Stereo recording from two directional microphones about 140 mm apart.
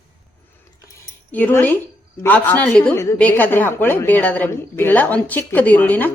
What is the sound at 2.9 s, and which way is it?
Speech, 20° left (ahead or behind).